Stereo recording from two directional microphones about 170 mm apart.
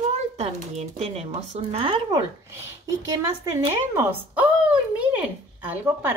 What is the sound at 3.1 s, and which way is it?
Speech, 20° right (ahead or behind).